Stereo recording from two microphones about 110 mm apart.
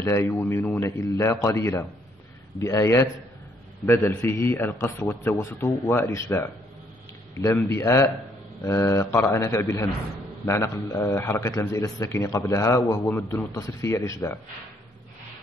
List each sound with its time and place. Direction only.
0.0 s a man's voice: 25° left (ahead or behind)
13.6 s a man's voice: 30° left (ahead or behind)